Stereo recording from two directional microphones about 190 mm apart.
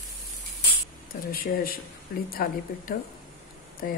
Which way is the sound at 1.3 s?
50° left (ahead or behind).